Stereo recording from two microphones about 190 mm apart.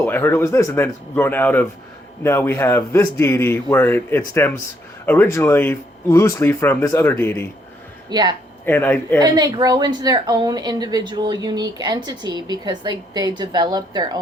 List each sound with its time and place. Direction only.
0.0 s a man's voice: 10° left (ahead or behind)
8.1 s a woman's voice: 20° right (ahead or behind)
8.6 s a man's voice: 10° left (ahead or behind)
9.1 s a woman's voice: 20° right (ahead or behind)